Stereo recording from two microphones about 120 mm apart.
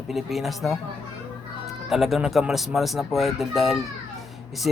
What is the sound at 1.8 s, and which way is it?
Speech, centre (ahead or behind).